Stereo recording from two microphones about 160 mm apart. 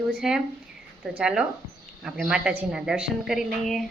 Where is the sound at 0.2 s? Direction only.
Centre (ahead or behind).